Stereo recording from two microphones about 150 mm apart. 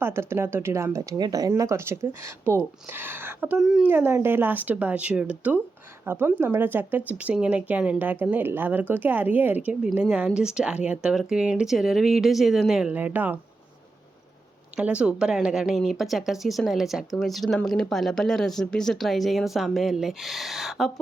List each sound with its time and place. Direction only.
0.0 s speech: 15° right (ahead or behind)
3.6 s speech: 5° right (ahead or behind)
3.9 s speech: 15° right (ahead or behind)
14.8 s speech: 10° right (ahead or behind)